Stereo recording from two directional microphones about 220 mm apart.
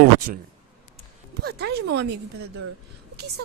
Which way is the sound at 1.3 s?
45° right (ahead or behind).